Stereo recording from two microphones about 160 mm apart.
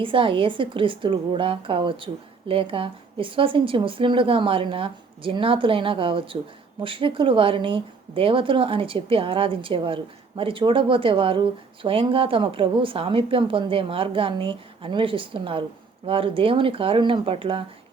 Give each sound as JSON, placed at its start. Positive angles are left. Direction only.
{"t": 0.0, "sound": "a woman's voice", "side_deg": -30}